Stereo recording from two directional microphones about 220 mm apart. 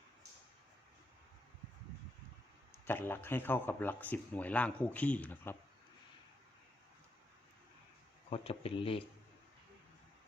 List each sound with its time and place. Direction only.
2.7 s speech: 10° left (ahead or behind)
8.3 s speech: 25° left (ahead or behind)